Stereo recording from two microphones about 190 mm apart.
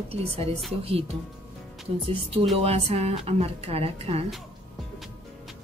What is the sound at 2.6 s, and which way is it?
Speech, 30° right (ahead or behind).